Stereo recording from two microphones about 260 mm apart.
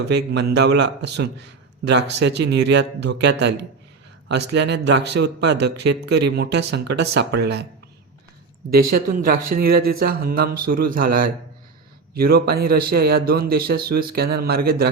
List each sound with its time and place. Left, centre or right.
0.1 s a man's voice: right
8.9 s a man's voice: right